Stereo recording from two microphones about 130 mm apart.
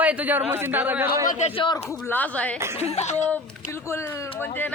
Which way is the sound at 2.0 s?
15° left (ahead or behind).